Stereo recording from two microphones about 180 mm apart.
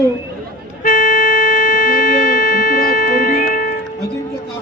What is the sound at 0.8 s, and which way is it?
Music, 50° left (ahead or behind).